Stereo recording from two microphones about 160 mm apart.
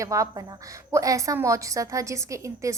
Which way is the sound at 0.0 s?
20° right (ahead or behind).